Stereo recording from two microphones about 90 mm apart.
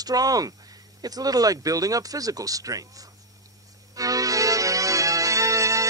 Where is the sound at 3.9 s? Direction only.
40° right (ahead or behind).